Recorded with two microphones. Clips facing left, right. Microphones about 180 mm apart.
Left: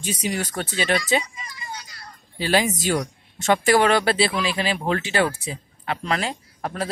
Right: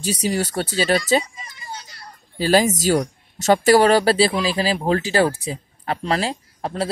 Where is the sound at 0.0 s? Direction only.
35° right (ahead or behind).